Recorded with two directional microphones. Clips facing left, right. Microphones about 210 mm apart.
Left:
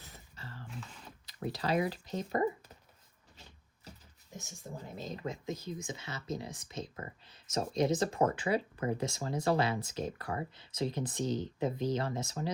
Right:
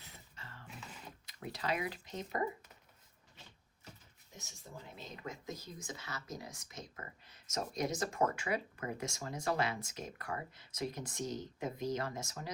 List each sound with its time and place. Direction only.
0.0 s a sound: 35° left (ahead or behind)
1.3 s speech: 35° left (ahead or behind)
4.9 s speech: 35° left (ahead or behind)